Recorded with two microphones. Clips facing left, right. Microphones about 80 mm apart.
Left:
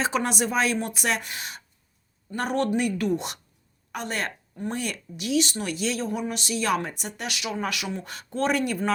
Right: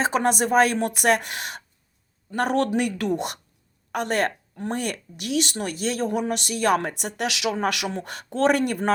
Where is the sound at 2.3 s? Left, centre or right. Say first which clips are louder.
Right 3 dB; right.